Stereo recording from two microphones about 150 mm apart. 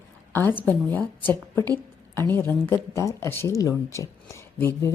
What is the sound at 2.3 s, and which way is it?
A woman's voice, 15° left (ahead or behind).